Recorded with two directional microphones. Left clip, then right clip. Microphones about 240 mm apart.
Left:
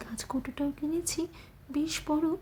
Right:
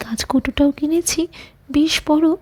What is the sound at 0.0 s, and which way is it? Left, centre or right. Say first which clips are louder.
A woman's voice: right 16 dB; right.